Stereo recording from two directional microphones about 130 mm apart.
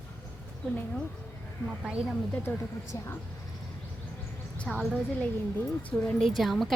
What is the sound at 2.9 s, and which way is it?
Speech, 25° left (ahead or behind).